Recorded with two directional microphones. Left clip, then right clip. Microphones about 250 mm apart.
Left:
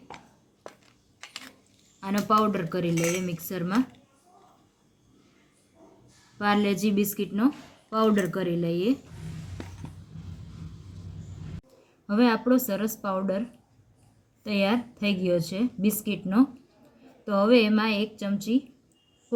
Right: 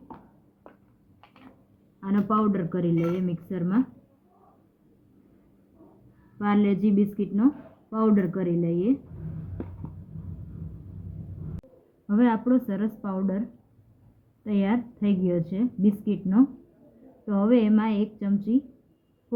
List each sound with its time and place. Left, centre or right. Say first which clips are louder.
2.0 s a woman's voice: left 2 dB; left
6.4 s a woman's voice: left 1 dB; left
12.0 s a woman's voice: left 1 dB; left
14.4 s a woman's voice: left 2 dB; left
17.2 s a woman's voice: left 3 dB; left